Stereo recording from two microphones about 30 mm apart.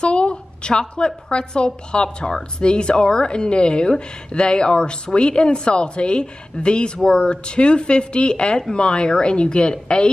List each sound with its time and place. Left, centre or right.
0.0 s a woman's voice: left